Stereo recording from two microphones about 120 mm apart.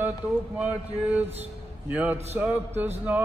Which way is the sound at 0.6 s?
10° right (ahead or behind).